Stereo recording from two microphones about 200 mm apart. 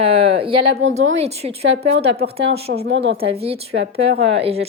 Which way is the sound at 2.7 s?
55° right (ahead or behind).